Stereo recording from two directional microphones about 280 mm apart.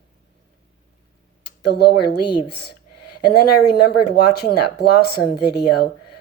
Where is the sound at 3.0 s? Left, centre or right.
Left.